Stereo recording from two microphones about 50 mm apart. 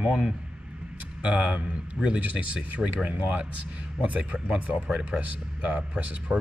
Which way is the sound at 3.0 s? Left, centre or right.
Right.